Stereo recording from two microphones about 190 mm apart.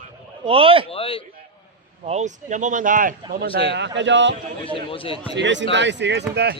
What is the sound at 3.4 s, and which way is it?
Speech, 30° left (ahead or behind).